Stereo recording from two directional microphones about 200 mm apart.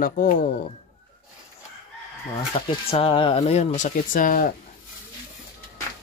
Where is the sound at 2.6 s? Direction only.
25° left (ahead or behind); by 4.5 s 45° left (ahead or behind).